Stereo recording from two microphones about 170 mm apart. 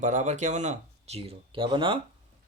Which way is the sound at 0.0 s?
45° right (ahead or behind).